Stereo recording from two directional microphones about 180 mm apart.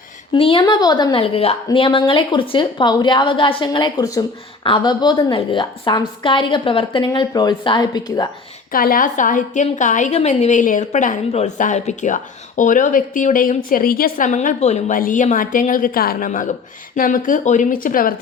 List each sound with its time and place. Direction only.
0.3 s a woman's voice: 30° left (ahead or behind)
8.7 s a woman's voice: 50° left (ahead or behind)